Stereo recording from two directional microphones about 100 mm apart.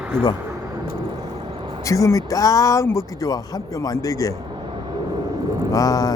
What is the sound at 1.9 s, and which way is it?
Speech, 35° left (ahead or behind).